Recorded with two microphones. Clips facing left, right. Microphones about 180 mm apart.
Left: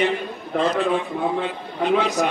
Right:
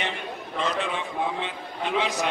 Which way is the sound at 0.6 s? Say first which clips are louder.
Left 7 dB; 35° left (ahead or behind).